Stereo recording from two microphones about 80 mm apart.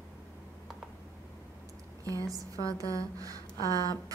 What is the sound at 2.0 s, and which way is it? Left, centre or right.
A woman's voice, right.